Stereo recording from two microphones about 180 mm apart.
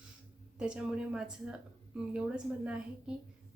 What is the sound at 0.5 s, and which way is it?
Speech, 5° right (ahead or behind).